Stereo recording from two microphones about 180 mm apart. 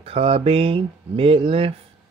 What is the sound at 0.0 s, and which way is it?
Speech, 35° right (ahead or behind).